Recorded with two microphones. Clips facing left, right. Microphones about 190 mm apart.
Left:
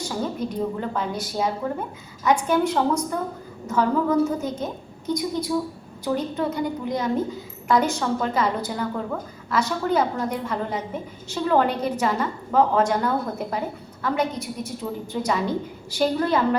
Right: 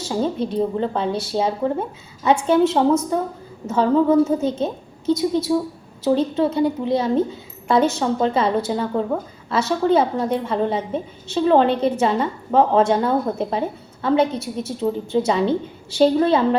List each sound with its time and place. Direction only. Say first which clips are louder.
0.0 s a woman's voice: right 5 dB; 25° right (ahead or behind)